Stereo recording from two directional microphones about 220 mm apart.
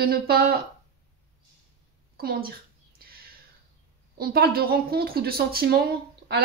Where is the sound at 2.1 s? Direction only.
45° right (ahead or behind).